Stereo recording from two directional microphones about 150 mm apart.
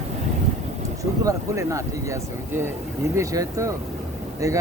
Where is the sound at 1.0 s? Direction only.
20° right (ahead or behind).